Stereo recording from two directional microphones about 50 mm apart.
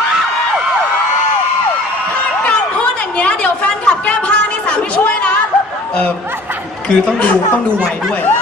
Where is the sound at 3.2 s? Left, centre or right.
Left.